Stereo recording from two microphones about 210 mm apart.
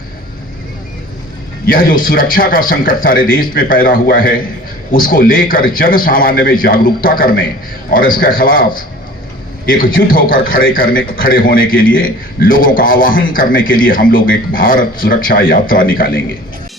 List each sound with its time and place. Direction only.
1.6 s a man's voice: 40° left (ahead or behind)